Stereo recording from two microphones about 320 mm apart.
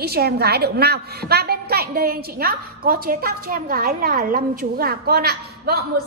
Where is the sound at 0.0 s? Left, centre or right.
Right.